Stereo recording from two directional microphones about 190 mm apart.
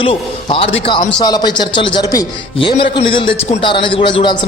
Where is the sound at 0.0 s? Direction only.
30° left (ahead or behind).